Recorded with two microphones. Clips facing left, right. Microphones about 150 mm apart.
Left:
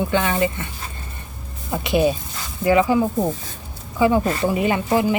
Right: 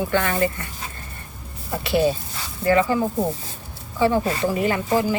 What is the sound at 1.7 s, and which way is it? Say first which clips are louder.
A woman's voice: left 1 dB; 20° left (ahead or behind).